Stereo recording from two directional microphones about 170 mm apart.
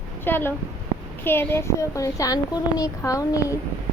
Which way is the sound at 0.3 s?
10° left (ahead or behind).